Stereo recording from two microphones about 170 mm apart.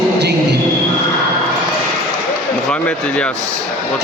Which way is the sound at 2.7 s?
5° left (ahead or behind).